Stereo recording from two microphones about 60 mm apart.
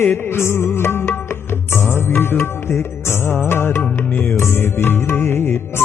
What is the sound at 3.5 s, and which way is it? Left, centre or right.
Music, left.